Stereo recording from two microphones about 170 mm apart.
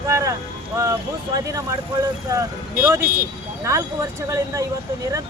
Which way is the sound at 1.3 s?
20° right (ahead or behind).